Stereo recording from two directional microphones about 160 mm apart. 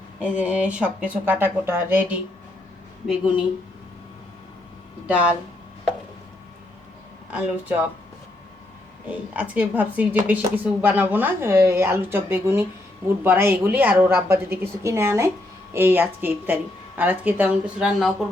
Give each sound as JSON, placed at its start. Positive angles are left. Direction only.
{"t": 0.2, "sound": "speech", "side_deg": -10}
{"t": 5.0, "sound": "speech", "side_deg": -10}
{"t": 7.3, "sound": "speech", "side_deg": -10}
{"t": 9.0, "sound": "speech", "side_deg": -10}